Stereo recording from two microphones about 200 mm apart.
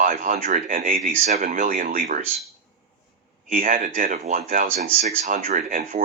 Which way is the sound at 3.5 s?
45° right (ahead or behind).